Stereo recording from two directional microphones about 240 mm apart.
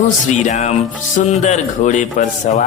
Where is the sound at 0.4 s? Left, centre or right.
Left.